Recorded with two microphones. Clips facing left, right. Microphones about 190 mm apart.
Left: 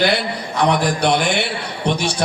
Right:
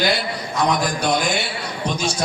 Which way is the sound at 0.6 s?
65° left (ahead or behind).